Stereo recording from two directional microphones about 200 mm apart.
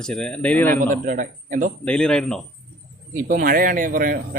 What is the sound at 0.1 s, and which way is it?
Speech, 5° left (ahead or behind).